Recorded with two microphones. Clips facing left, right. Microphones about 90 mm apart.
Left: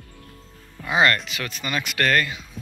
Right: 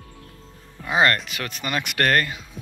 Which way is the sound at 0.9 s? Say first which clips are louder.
Even; 40° right (ahead or behind).